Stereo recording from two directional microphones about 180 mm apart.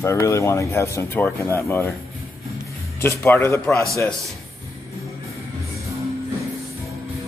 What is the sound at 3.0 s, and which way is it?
Speech, 10° left (ahead or behind).